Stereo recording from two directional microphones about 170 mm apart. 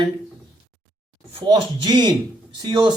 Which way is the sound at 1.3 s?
25° right (ahead or behind).